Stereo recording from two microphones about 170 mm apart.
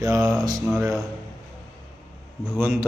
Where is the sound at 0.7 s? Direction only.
Centre (ahead or behind).